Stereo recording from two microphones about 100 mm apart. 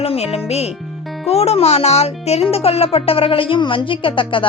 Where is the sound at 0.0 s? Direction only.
85° left.